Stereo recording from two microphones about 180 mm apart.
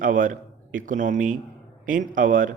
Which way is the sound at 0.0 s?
45° right (ahead or behind).